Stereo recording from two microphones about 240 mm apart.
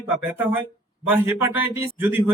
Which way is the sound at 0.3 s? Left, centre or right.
Centre.